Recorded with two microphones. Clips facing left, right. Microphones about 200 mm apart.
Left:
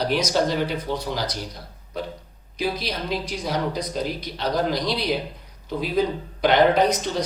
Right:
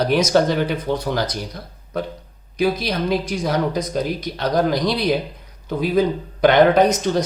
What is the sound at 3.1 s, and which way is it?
Speech, 50° right (ahead or behind).